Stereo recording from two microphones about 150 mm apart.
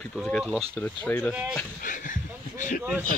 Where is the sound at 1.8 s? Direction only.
60° left (ahead or behind).